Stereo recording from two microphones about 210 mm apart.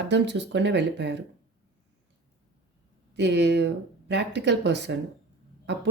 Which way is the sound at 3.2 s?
55° right (ahead or behind).